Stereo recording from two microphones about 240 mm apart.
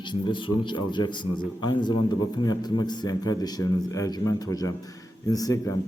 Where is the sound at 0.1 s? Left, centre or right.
Centre.